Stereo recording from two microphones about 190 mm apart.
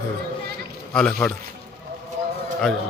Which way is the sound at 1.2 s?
5° left (ahead or behind).